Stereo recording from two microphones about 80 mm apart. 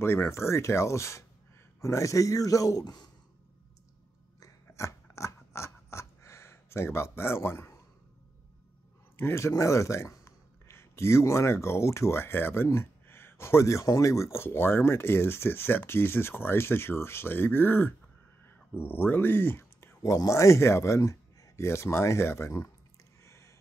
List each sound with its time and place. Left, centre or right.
0.0 s a man's voice: left
4.4 s scissors: left
9.1 s speech: left
20.0 s speech: left
23.2 s a sound: left